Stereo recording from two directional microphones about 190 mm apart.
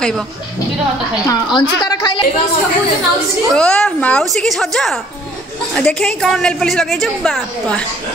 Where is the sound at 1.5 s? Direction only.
25° left (ahead or behind).